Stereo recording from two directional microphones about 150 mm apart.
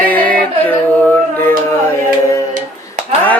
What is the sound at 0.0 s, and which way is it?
Music, 10° left (ahead or behind).